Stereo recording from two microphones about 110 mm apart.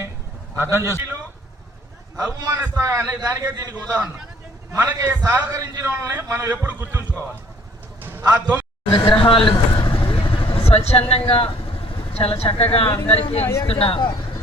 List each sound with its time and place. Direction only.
0.6 s a man's voice: 25° right (ahead or behind)
2.6 s a man's voice: 25° right (ahead or behind)
8.2 s a man's voice: 35° right (ahead or behind)
8.9 s speech: 55° left (ahead or behind)
13.4 s speech: 25° left (ahead or behind)
13.7 s speech: 60° left (ahead or behind)